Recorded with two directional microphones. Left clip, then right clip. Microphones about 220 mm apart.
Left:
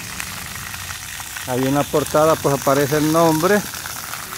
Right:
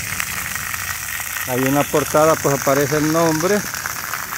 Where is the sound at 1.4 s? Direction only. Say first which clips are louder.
Right 1 dB; 10° left (ahead or behind).